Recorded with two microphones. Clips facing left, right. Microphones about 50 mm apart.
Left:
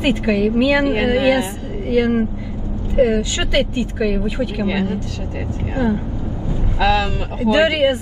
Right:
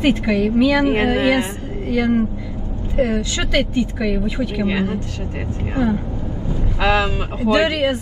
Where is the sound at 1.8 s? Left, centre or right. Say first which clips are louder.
Left 1 dB; left.